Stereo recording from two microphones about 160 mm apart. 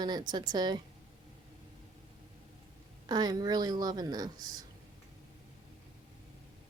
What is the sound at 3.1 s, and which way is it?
A woman's voice, 25° right (ahead or behind).